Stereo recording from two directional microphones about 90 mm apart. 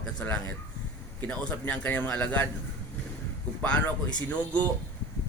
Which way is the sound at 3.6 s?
20° left (ahead or behind).